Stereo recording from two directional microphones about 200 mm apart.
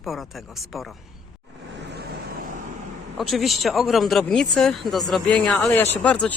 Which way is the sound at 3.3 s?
Centre (ahead or behind).